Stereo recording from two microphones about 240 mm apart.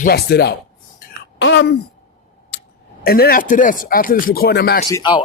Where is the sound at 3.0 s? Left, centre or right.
Left.